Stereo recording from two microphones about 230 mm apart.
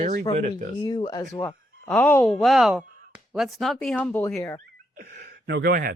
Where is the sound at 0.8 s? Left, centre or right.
Centre.